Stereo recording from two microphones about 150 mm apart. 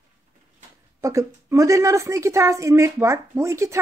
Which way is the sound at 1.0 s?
20° right (ahead or behind).